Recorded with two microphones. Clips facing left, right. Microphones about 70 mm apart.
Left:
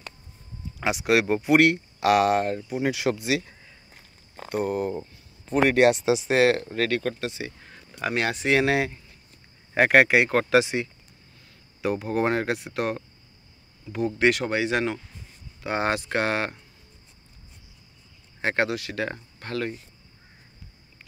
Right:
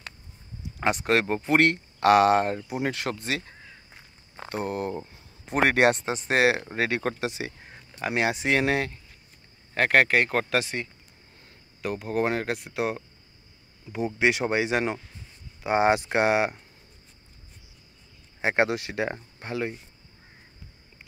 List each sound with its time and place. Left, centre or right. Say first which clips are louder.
0.8 s speech: left 1 dB; centre
2.9 s speech: left 5 dB; centre
4.6 s speech: left 3 dB; centre
5.5 s speech: left 2 dB; right
5.8 s speech: left 3 dB; centre
6.6 s speech: left 1 dB; centre
8.0 s speech: even; centre
18.4 s speech: right 1 dB; centre